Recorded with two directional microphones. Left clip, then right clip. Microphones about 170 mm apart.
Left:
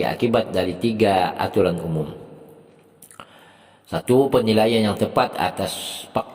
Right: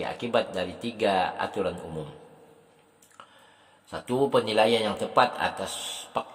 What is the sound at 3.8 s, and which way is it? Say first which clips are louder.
Speech: left 9 dB; 40° left (ahead or behind).